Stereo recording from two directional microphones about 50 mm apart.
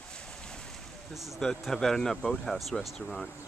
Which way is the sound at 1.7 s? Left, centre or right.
Centre.